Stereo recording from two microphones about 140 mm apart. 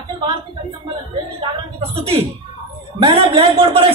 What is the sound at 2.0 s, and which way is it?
A man's voice, 45° right (ahead or behind).